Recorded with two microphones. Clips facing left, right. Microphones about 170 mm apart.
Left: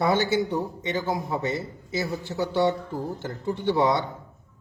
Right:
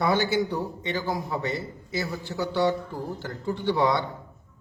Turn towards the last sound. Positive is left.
turn(degrees=25)  # may be behind; listen again after turning